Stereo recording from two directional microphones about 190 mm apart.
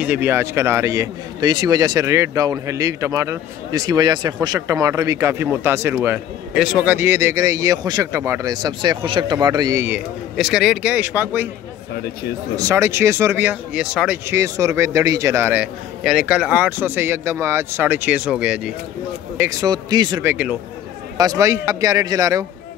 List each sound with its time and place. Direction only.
0.0 s a man's voice: 10° right (ahead or behind)
12.5 s a man's voice: 15° right (ahead or behind)
19.3 s a man's voice: 15° right (ahead or behind)
20.2 s a man's voice: 5° right (ahead or behind)
21.2 s a man's voice: 15° right (ahead or behind)